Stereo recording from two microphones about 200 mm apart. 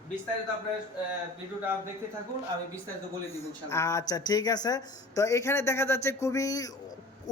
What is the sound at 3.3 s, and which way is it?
A man's voice, 15° left (ahead or behind).